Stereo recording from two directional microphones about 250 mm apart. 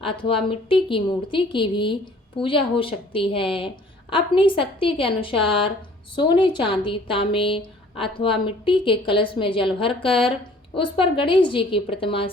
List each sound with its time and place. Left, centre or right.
0.0 s a woman's voice: left